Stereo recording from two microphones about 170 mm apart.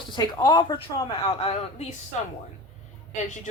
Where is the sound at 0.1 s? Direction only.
25° left (ahead or behind).